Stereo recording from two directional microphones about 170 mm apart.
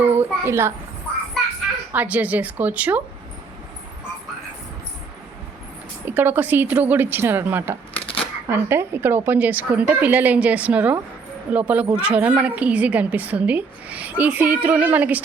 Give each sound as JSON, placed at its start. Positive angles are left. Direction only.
{"t": 0.0, "sound": "a sound", "side_deg": -15}
{"t": 1.9, "sound": "a woman's voice", "side_deg": -10}
{"t": 6.1, "sound": "a woman's voice", "side_deg": -10}
{"t": 7.9, "sound": "shuffling cards", "side_deg": 35}
{"t": 8.4, "sound": "a woman's voice", "side_deg": -15}